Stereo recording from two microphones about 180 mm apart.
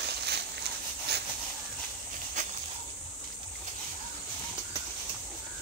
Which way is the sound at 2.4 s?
45° right (ahead or behind).